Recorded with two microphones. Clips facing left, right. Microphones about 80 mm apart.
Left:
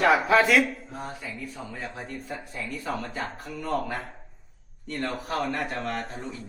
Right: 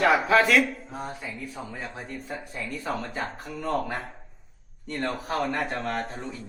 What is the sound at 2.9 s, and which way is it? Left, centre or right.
A man's voice, right.